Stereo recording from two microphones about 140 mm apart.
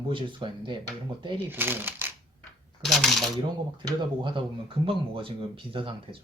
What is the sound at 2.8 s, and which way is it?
Speech, centre (ahead or behind).